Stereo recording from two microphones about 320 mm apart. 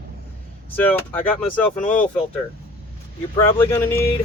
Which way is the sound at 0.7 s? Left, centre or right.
Centre.